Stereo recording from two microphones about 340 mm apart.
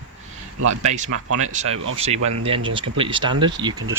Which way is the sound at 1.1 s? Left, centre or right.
Right.